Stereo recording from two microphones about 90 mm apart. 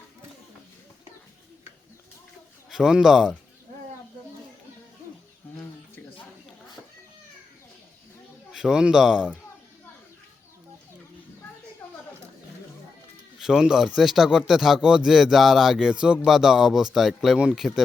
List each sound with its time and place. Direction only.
2.6 s speech: 5° right (ahead or behind)
8.5 s speech: 5° right (ahead or behind)
11.8 s a sound: 25° left (ahead or behind)
13.4 s speech: 5° right (ahead or behind)